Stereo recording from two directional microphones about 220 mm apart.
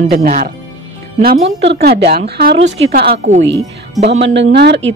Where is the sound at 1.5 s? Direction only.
50° right (ahead or behind).